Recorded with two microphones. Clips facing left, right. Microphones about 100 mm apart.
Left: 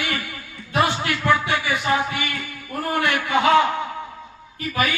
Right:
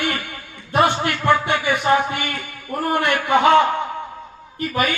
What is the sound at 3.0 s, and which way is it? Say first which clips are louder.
Speech: left 1 dB; 55° right (ahead or behind).